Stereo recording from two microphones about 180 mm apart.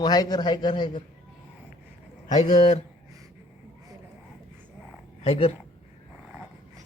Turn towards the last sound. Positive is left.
turn(degrees=35)  # may be behind; listen again after turning